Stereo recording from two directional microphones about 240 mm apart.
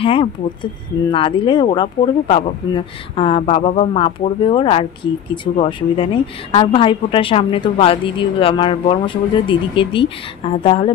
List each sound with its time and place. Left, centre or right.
0.0 s speech: left